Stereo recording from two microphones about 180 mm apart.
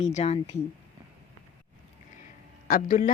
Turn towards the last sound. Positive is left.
turn(degrees=50)  # may be behind; listen again after turning